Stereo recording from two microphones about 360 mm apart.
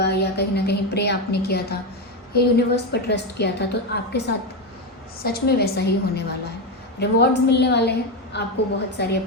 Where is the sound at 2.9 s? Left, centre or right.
Left.